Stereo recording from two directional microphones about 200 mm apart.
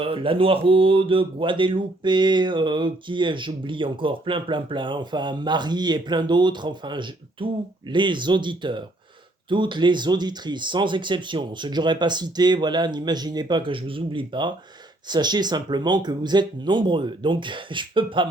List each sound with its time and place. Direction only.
0.0 s speech: 25° right (ahead or behind)